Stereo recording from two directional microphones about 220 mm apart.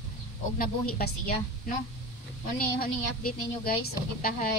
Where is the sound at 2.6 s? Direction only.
45° left (ahead or behind).